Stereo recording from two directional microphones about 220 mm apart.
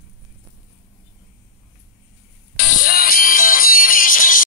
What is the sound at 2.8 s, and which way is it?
Music, 40° left (ahead or behind).